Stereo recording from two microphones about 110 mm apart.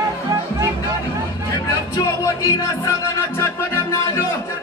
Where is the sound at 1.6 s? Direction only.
35° left (ahead or behind).